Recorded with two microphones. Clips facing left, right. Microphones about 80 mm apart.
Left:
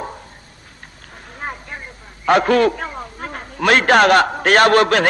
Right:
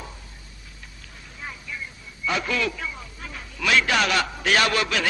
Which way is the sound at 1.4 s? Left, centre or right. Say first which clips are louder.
Left 6 dB; left.